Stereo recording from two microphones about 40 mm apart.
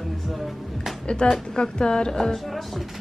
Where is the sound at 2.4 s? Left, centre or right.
Centre.